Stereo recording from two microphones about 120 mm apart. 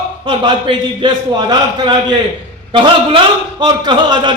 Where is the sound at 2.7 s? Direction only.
45° right (ahead or behind).